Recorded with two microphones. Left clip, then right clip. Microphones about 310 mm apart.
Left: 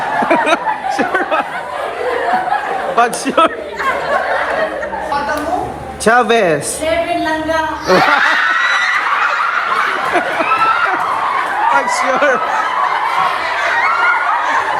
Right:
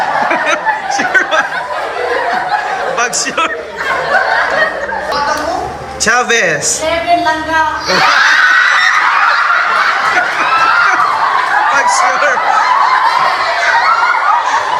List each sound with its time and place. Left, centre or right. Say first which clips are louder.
0.3 s a sound: right 1 dB; centre
3.0 s a man's voice: left 5 dB; centre
6.1 s a man's voice: even; centre
11.9 s snicker: right 3 dB; centre